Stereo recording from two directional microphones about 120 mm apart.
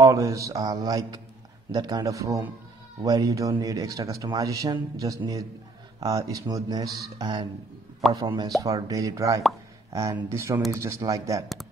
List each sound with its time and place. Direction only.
0.0 s speech: 25° right (ahead or behind)
8.0 s speech: centre (ahead or behind)
8.5 s speech: 30° right (ahead or behind)